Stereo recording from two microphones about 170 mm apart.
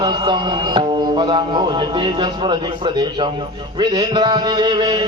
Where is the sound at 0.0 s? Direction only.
25° right (ahead or behind).